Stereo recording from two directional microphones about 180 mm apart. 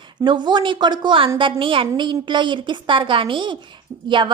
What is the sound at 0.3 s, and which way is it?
A woman's voice, 25° right (ahead or behind).